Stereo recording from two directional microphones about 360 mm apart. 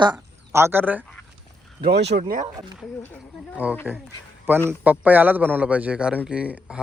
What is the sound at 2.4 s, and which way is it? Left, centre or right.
A man's voice, centre.